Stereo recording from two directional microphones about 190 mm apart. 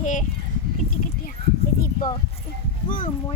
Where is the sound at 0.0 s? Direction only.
40° left (ahead or behind).